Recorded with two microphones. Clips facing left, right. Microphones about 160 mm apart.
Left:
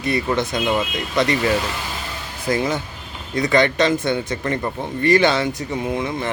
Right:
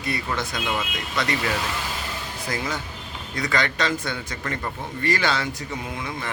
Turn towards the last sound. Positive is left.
turn(degrees=25)  # may be behind; listen again after turning